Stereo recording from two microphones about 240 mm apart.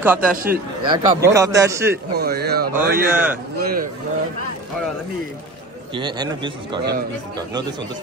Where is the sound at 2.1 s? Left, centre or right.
Right.